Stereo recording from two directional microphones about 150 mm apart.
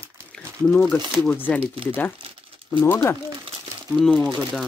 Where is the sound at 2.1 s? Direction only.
35° right (ahead or behind).